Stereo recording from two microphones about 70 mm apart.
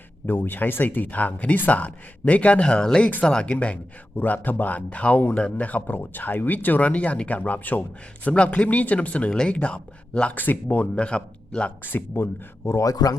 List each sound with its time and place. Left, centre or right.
0.3 s speech: left
11.8 s speech: left